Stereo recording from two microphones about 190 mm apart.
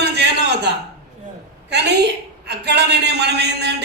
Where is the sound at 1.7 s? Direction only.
60° right (ahead or behind).